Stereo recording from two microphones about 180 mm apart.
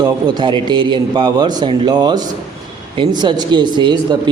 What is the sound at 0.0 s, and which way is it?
A man's voice, 25° right (ahead or behind).